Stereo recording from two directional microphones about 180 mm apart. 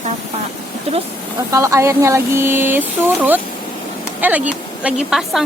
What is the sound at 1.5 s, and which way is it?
A woman's voice, 15° right (ahead or behind).